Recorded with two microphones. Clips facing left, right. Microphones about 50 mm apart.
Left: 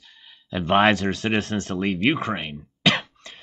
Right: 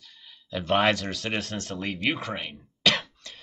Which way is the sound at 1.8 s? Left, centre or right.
Left.